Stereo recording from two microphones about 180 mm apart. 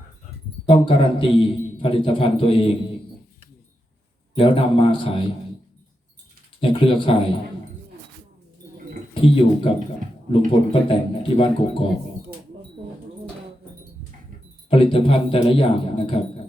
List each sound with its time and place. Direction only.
0.6 s a man's voice: 30° left (ahead or behind)
4.4 s a man's voice: 30° left (ahead or behind)
6.6 s a man's voice: 30° left (ahead or behind)
9.2 s a man's voice: 30° left (ahead or behind)
14.7 s speech: 30° left (ahead or behind)